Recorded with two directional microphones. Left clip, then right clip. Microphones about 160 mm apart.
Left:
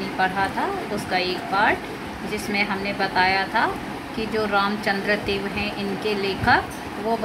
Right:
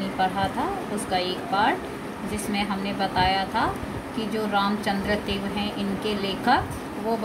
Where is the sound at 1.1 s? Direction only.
15° left (ahead or behind).